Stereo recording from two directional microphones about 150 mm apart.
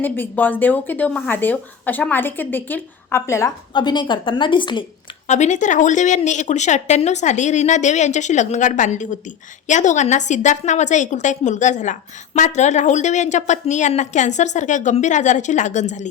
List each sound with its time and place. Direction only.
0.0 s speech: 10° left (ahead or behind)
3.8 s a woman's voice: 30° left (ahead or behind)
5.3 s a woman's voice: 55° left (ahead or behind)